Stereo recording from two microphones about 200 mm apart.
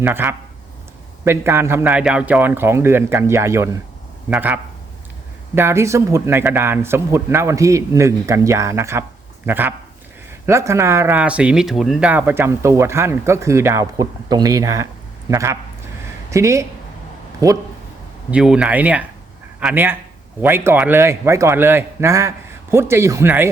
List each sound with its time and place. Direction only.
0.0 s speech: 10° right (ahead or behind)
18.3 s speech: 5° right (ahead or behind)